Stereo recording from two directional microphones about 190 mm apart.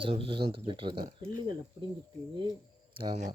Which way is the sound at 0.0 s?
30° right (ahead or behind).